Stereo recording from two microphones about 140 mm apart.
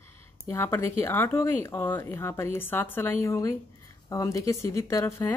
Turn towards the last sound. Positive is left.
turn(degrees=20)  # may be behind; listen again after turning